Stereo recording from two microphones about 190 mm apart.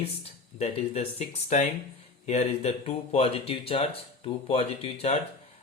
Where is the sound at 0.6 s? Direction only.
35° left (ahead or behind).